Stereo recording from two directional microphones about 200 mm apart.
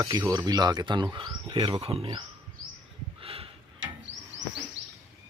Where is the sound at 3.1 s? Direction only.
30° right (ahead or behind).